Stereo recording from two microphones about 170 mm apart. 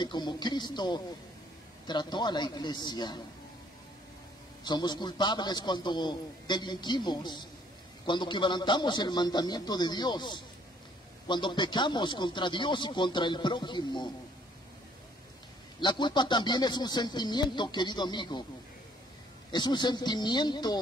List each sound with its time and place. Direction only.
0.0 s speech: 25° left (ahead or behind)
4.6 s speech: 25° left (ahead or behind)
15.8 s speech: 25° left (ahead or behind)
19.5 s speech: 25° left (ahead or behind)